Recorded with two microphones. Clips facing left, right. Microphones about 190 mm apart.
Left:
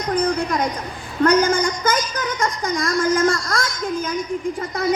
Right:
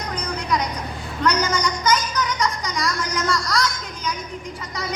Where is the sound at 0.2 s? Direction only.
50° left (ahead or behind).